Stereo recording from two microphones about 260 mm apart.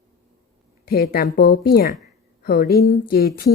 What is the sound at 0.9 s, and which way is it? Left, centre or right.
A woman's voice, left.